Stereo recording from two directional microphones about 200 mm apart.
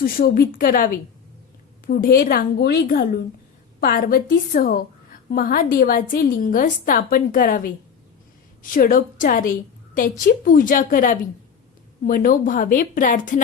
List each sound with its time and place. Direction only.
0.0 s a woman's voice: 50° left (ahead or behind)